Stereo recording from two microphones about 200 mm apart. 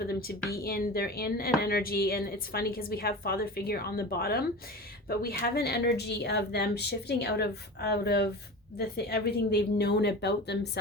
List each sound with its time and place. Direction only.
0.1 s a woman's voice: 50° left (ahead or behind)